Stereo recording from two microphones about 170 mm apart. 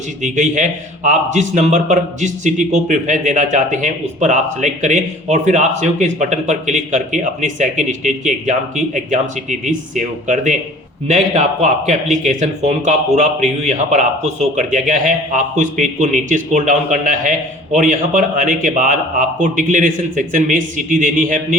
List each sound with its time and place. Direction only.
0.2 s a man's voice: 45° right (ahead or behind)